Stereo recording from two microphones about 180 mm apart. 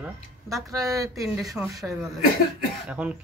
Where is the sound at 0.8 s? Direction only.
15° right (ahead or behind).